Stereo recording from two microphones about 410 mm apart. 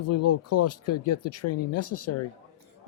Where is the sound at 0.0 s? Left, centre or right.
Left.